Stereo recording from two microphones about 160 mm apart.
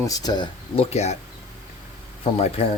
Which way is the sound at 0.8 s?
40° left (ahead or behind).